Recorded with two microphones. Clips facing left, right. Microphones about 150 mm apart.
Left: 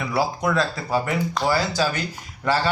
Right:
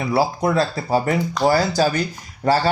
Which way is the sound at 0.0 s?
35° right (ahead or behind).